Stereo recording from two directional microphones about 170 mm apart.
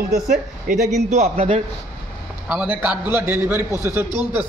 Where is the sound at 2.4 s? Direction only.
10° right (ahead or behind).